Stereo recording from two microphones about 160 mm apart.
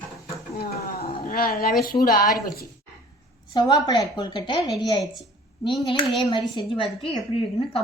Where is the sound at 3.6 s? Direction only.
25° left (ahead or behind).